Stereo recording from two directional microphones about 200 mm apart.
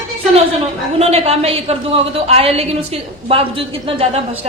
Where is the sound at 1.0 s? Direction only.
30° right (ahead or behind).